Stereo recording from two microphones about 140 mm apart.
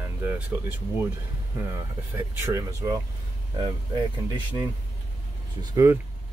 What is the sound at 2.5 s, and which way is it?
Speech, 20° right (ahead or behind).